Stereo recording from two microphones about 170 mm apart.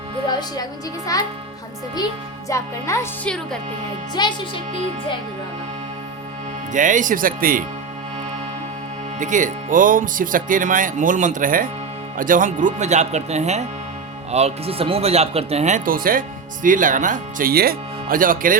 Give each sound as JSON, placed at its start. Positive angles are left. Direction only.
{"t": 0.3, "sound": "a woman's voice", "side_deg": 25}
{"t": 2.5, "sound": "speech", "side_deg": 15}
{"t": 3.2, "sound": "speech", "side_deg": 5}
{"t": 4.1, "sound": "a woman's voice", "side_deg": 25}
{"t": 6.7, "sound": "speech", "side_deg": -50}
{"t": 9.1, "sound": "speech", "side_deg": -50}